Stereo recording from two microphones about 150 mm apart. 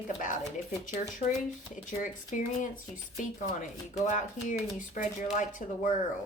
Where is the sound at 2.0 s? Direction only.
60° left (ahead or behind).